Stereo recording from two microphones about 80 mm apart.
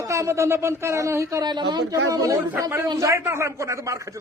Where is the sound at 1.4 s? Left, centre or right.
Right.